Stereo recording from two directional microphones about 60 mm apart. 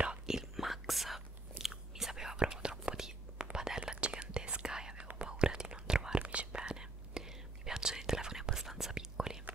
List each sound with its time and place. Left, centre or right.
0.0 s whispering: centre